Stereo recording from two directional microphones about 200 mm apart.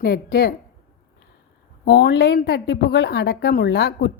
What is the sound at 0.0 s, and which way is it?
Speech, 55° left (ahead or behind).